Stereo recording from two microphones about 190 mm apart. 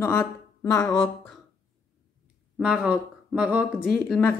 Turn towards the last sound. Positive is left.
turn(degrees=5)  # may be behind; listen again after turning